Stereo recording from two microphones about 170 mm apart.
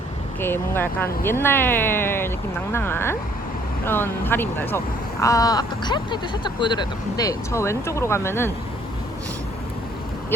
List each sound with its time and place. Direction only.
0.3 s speech: 15° left (ahead or behind)